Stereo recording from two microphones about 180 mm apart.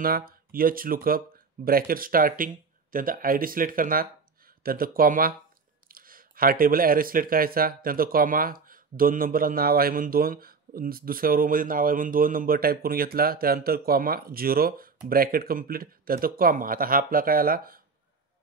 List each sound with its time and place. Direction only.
0.0 s speech: 55° right (ahead or behind)